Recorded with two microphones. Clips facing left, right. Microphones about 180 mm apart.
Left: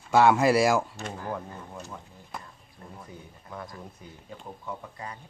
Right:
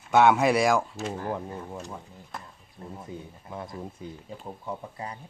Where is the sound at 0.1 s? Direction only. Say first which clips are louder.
Even; centre (ahead or behind).